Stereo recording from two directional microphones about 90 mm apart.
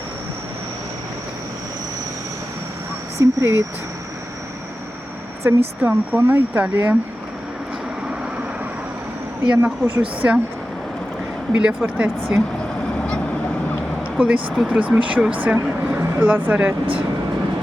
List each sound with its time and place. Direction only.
3.2 s speech: 30° right (ahead or behind)
5.5 s speech: 20° right (ahead or behind)
9.6 s speech: 25° right (ahead or behind)
10.2 s speech: 15° right (ahead or behind)
11.5 s speech: 10° right (ahead or behind)
14.2 s speech: 10° right (ahead or behind)